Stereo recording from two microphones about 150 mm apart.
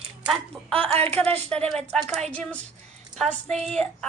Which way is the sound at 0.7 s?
40° right (ahead or behind).